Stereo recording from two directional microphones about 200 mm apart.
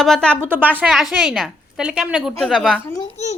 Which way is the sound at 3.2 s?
35° left (ahead or behind).